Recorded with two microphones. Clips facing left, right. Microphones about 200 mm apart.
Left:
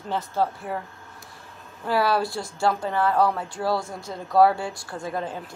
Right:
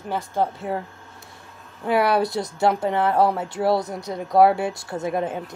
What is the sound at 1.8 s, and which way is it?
Speech, 20° right (ahead or behind).